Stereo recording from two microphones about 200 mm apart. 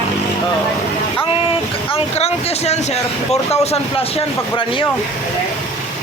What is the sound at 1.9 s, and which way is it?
Speech, 30° left (ahead or behind).